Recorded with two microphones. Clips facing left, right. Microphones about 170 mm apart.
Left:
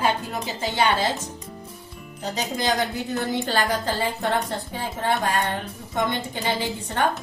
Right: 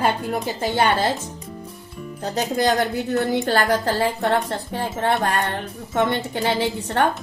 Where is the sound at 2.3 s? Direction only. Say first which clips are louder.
Right 5 dB; 60° right (ahead or behind).